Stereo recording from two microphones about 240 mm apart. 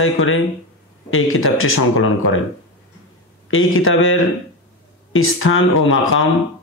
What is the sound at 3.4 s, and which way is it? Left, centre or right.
Speech, left.